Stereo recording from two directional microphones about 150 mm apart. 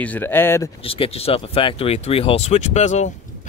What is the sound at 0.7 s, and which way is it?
Speech, 35° left (ahead or behind).